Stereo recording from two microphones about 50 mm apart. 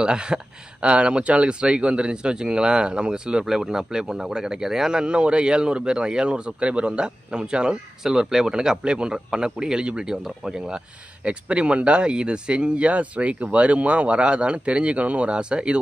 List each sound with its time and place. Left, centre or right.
0.0 s speech: centre